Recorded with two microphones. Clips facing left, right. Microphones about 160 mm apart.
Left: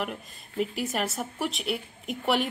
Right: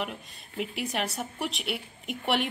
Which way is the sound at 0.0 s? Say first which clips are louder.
Left 2 dB; centre (ahead or behind).